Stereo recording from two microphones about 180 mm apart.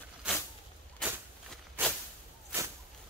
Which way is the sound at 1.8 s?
10° right (ahead or behind).